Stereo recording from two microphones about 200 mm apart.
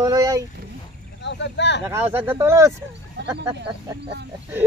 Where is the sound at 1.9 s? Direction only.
10° right (ahead or behind).